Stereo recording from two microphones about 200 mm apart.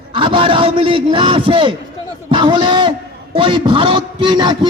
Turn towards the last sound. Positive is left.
turn(degrees=-25)  # may be behind; listen again after turning